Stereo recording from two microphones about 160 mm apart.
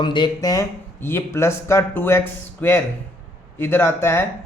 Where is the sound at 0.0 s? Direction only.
30° left (ahead or behind).